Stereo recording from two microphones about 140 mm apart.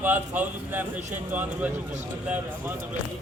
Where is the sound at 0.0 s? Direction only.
15° right (ahead or behind).